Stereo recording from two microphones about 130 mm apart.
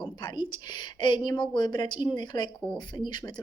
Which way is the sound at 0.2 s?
35° left (ahead or behind).